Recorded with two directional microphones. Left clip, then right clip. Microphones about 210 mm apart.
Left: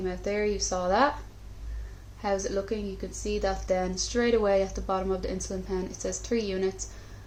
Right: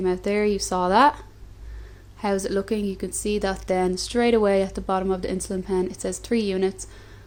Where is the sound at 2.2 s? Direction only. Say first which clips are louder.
Right 4 dB; 50° right (ahead or behind).